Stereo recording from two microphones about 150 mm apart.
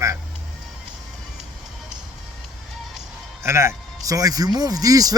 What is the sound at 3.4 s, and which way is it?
A man's voice, 20° right (ahead or behind).